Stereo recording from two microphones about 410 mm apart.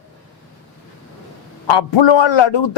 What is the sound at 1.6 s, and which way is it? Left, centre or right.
A man's voice, left.